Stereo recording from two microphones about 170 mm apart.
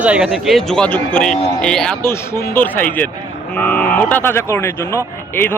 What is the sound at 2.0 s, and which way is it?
Speech, 15° left (ahead or behind).